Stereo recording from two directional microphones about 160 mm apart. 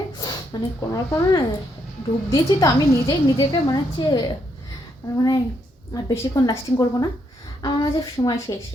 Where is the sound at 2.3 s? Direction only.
20° left (ahead or behind).